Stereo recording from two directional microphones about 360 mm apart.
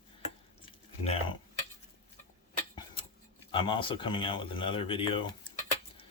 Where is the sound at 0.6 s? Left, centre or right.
Centre.